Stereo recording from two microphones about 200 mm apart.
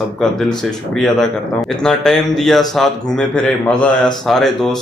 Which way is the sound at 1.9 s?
Centre (ahead or behind).